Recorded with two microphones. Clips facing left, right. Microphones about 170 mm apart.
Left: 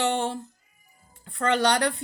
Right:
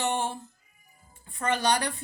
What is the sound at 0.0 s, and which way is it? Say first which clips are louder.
Music: left 3 dB; 75° left (ahead or behind).